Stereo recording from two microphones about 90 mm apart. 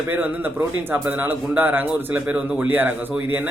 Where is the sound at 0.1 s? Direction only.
20° right (ahead or behind).